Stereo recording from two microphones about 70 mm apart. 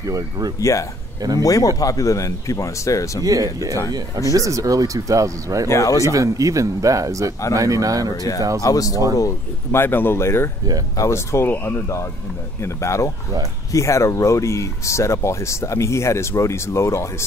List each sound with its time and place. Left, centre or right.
0.6 s speech: left
3.3 s speech: right
5.7 s speech: left
6.0 s speech: right
8.6 s speech: left
9.7 s speech: left
12.6 s speech: left